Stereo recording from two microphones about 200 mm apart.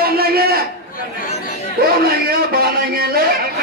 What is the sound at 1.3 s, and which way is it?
Chatter, 30° left (ahead or behind).